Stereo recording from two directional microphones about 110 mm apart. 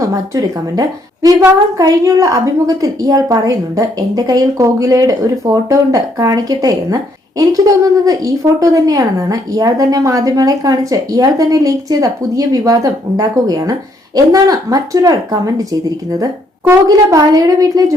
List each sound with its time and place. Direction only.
0.0 s a woman's voice: 30° right (ahead or behind)
16.9 s a woman's voice: 30° right (ahead or behind)